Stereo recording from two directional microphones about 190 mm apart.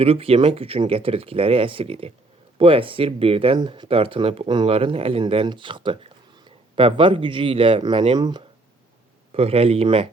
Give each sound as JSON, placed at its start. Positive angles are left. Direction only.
{"t": 0.0, "sound": "speech", "side_deg": -30}